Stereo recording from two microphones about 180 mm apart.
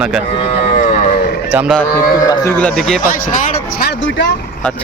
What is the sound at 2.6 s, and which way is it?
Speech, 5° left (ahead or behind).